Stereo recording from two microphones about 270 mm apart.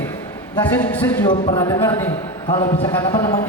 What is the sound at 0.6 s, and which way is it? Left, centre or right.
Speech, centre.